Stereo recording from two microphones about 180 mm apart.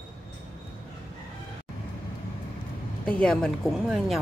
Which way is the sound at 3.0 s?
5° left (ahead or behind).